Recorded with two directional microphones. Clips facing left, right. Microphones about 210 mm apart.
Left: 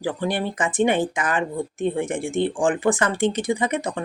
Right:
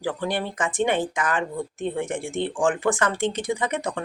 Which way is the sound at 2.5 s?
15° left (ahead or behind).